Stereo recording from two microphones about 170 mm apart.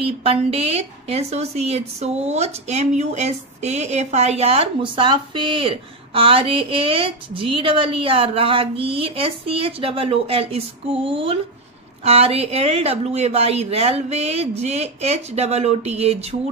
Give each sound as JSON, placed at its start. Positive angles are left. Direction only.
{"t": 0.0, "sound": "a woman's voice", "side_deg": -35}